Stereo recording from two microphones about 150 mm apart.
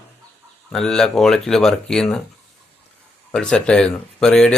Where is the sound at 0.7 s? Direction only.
5° left (ahead or behind).